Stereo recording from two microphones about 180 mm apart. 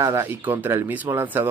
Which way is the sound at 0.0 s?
15° right (ahead or behind).